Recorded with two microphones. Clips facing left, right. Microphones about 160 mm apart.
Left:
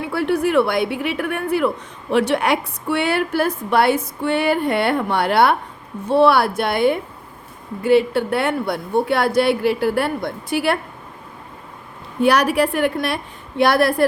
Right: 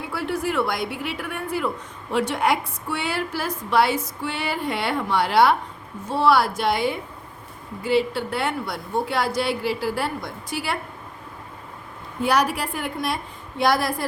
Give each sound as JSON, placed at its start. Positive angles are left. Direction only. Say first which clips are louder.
{"t": 0.1, "sound": "a woman's voice", "louder": "left 8 dB", "side_deg": 60}
{"t": 12.2, "sound": "a woman's voice", "louder": "left 6 dB", "side_deg": 65}